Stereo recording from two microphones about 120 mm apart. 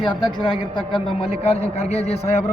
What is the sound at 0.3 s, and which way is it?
A man's voice, 45° left (ahead or behind).